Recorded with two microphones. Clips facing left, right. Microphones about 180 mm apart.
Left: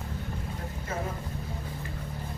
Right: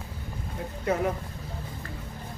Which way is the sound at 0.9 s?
70° right (ahead or behind).